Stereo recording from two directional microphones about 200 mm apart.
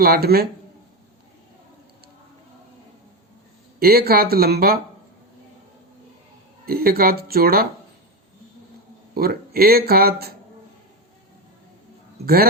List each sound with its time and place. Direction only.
0.0 s speech: 50° right (ahead or behind)
3.8 s speech: 50° right (ahead or behind)
6.7 s speech: 50° right (ahead or behind)
9.1 s speech: 50° right (ahead or behind)
12.2 s speech: 50° right (ahead or behind)